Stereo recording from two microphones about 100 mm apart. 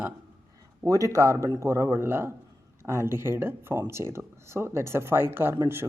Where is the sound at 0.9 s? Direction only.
35° right (ahead or behind).